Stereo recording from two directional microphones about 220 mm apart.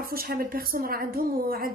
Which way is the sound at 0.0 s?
45° right (ahead or behind).